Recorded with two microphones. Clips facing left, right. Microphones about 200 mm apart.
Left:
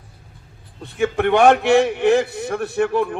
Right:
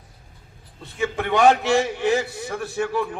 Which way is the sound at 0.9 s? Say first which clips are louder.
Left 5 dB; 60° left (ahead or behind).